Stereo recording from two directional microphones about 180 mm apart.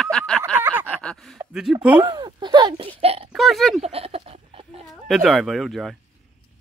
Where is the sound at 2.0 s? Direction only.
25° right (ahead or behind).